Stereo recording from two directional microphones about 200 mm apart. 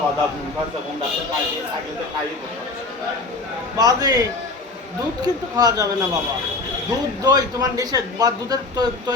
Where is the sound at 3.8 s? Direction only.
20° right (ahead or behind).